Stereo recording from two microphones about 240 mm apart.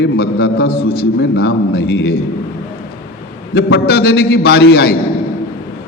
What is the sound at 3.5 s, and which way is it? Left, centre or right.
A man's voice, left.